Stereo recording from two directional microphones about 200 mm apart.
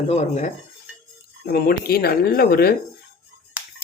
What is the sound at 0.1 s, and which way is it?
Cutlery, 35° left (ahead or behind).